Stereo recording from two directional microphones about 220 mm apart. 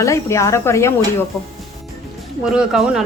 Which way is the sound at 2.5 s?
5° right (ahead or behind).